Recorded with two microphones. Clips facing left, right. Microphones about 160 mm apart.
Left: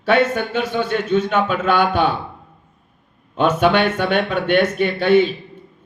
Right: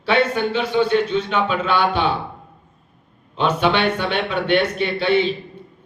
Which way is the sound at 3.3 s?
50° left (ahead or behind).